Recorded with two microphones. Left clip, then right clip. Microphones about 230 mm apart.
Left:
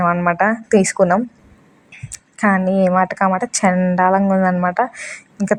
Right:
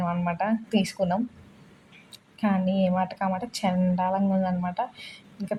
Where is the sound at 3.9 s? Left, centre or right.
Left.